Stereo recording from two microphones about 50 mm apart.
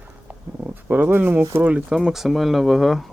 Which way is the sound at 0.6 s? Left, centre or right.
Right.